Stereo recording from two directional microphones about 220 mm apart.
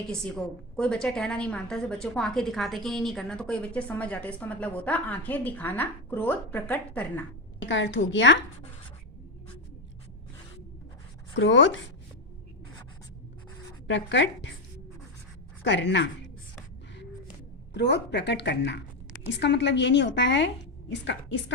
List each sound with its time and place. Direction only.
0.8 s a woman's voice: 5° left (ahead or behind)
7.6 s a woman's voice: 55° left (ahead or behind)
11.3 s a woman's voice: 55° left (ahead or behind)
13.8 s a woman's voice: 55° left (ahead or behind)
15.6 s a woman's voice: 55° left (ahead or behind)
17.7 s a woman's voice: 50° left (ahead or behind)